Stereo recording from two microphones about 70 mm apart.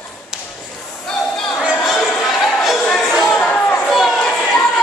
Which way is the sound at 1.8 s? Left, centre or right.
Centre.